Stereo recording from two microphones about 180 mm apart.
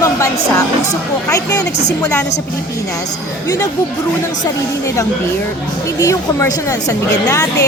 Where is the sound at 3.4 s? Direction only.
15° left (ahead or behind).